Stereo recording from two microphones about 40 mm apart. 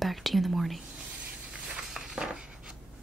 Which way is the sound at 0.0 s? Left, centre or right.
Centre.